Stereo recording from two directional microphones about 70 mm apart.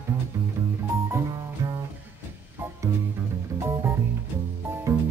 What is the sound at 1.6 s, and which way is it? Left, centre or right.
Music, right.